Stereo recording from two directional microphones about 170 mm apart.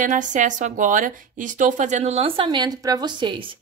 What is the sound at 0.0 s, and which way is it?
A woman's voice, 50° right (ahead or behind).